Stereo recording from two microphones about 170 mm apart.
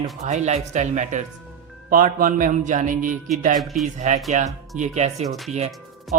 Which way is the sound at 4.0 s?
45° right (ahead or behind).